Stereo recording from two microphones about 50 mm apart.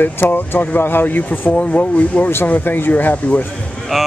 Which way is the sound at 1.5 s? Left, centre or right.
Left.